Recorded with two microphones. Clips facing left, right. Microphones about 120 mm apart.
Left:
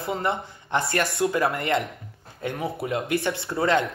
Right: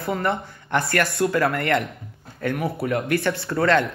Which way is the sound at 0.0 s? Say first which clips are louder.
Right 2 dB; 20° left (ahead or behind).